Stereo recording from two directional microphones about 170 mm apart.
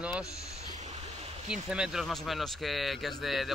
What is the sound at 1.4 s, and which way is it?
Speech, 5° right (ahead or behind).